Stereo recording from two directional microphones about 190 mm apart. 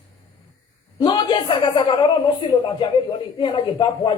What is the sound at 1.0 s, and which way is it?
Speech, 25° left (ahead or behind).